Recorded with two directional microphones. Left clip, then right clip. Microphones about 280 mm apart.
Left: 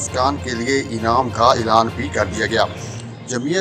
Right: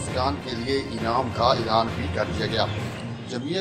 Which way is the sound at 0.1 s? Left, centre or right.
Left.